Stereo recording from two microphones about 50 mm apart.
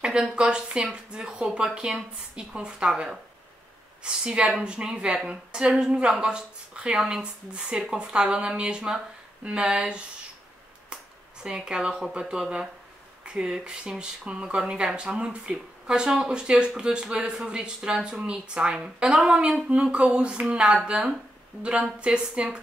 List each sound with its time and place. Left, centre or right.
0.0 s speech: centre
11.4 s speech: centre